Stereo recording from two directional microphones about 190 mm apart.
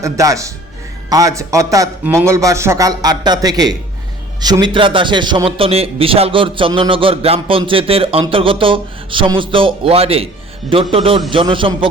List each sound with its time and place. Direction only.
0.0 s a man's voice: 15° right (ahead or behind)